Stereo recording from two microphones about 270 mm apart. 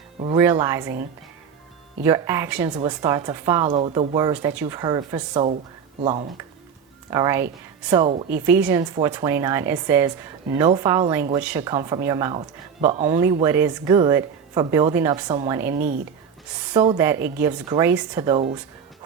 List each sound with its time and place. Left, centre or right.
0.2 s speech: centre
2.0 s speech: centre
7.1 s speech: centre
8.3 s speech: centre
15.7 s speech: right
16.7 s speech: centre